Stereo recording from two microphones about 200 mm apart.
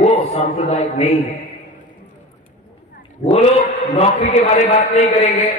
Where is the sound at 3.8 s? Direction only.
35° left (ahead or behind).